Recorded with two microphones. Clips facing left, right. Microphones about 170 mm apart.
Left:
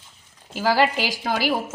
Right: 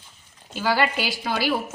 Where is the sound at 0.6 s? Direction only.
35° left (ahead or behind).